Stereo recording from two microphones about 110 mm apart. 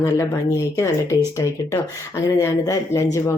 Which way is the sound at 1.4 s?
30° left (ahead or behind).